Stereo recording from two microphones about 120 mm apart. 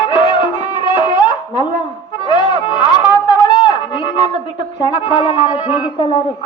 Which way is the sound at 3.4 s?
40° left (ahead or behind).